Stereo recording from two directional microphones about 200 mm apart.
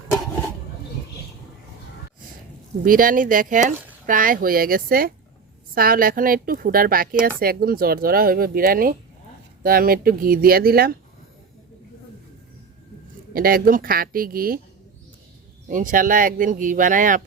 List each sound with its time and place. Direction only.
2.8 s speech: 45° right (ahead or behind)
13.3 s speech: 45° right (ahead or behind)
15.7 s speech: 40° right (ahead or behind)